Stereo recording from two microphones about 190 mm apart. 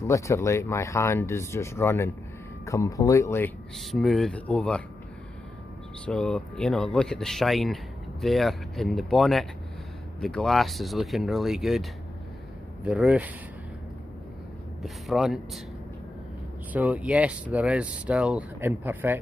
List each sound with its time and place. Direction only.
0.0 s speech: 15° left (ahead or behind)
3.7 s speech: centre (ahead or behind)
6.0 s speech: 5° left (ahead or behind)
14.8 s speech: centre (ahead or behind)
16.7 s speech: 10° right (ahead or behind)